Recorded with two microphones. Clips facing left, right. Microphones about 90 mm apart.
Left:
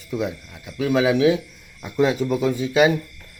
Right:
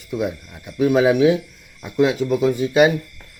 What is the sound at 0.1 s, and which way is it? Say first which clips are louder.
Speech: right 2 dB; 20° right (ahead or behind).